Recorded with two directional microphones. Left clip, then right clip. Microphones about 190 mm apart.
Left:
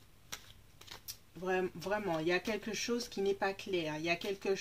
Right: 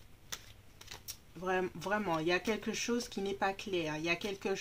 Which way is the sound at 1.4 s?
25° right (ahead or behind).